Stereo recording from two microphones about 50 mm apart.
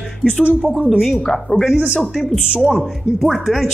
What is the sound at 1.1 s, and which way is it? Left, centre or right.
Speech, centre.